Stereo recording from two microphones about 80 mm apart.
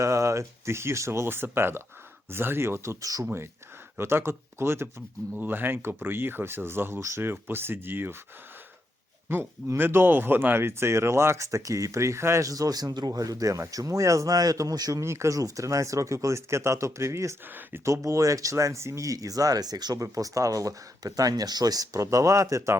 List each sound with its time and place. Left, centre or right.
0.0 s speech: right
3.9 s speech: right
9.3 s speech: right
15.0 s speech: right